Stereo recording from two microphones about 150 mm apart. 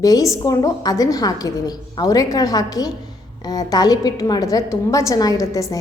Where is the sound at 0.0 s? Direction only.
25° left (ahead or behind).